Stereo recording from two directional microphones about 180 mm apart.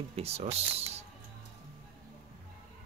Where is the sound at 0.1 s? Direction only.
35° right (ahead or behind).